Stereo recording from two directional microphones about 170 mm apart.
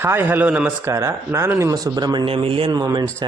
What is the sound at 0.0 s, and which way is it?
A man's voice, 10° right (ahead or behind).